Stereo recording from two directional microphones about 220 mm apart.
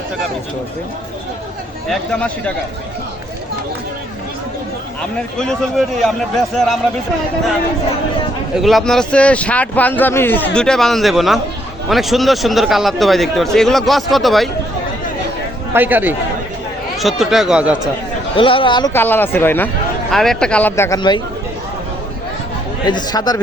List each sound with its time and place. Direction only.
1.9 s speech: 5° left (ahead or behind)
5.4 s speech: centre (ahead or behind)
8.5 s speech: centre (ahead or behind)
15.7 s a man's voice: 10° right (ahead or behind)
18.3 s speech: 25° left (ahead or behind)
18.9 s speech: 10° left (ahead or behind)
22.9 s speech: 20° left (ahead or behind)